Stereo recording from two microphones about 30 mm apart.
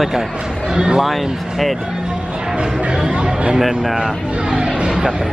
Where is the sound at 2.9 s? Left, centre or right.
Right.